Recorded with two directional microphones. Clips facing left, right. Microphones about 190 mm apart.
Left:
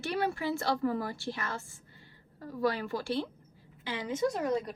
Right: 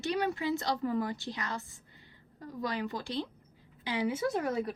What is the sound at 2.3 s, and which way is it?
A woman's voice, 20° right (ahead or behind).